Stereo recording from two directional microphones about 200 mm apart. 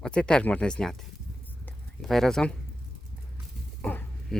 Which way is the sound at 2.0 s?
Centre (ahead or behind).